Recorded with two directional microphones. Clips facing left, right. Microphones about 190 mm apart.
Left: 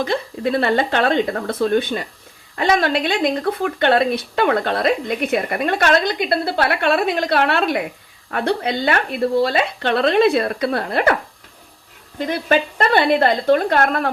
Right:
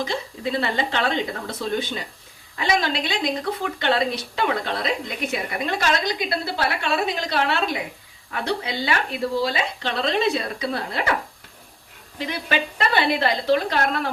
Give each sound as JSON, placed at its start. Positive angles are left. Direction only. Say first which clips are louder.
{"t": 0.0, "sound": "speech", "louder": "left 6 dB", "side_deg": 60}
{"t": 12.2, "sound": "a woman's voice", "louder": "left 7 dB", "side_deg": 50}